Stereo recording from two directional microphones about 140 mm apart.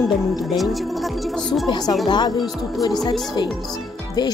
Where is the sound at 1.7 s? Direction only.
30° left (ahead or behind).